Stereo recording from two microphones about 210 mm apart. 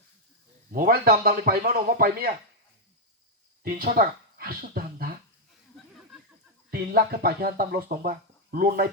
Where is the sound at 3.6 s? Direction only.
45° right (ahead or behind).